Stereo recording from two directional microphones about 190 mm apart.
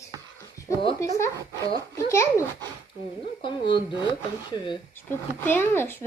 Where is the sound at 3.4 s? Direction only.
25° left (ahead or behind).